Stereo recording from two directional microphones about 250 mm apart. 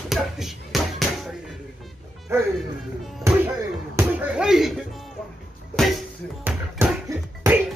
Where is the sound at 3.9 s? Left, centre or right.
Centre.